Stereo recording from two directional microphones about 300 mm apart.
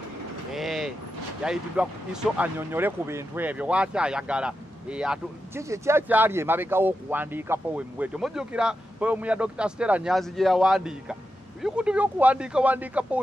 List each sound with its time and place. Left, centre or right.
0.5 s speech: centre